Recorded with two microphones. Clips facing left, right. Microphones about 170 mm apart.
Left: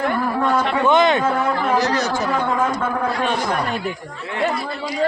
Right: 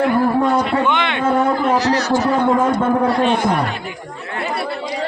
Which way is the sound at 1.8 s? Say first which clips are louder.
Right 3 dB; 50° left (ahead or behind).